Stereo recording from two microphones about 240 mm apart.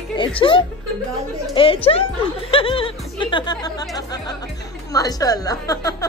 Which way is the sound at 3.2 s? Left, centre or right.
Centre.